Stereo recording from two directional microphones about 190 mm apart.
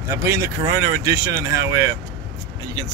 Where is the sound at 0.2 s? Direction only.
15° right (ahead or behind).